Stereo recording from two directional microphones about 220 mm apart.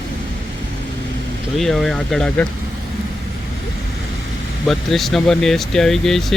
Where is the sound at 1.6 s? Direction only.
Centre (ahead or behind).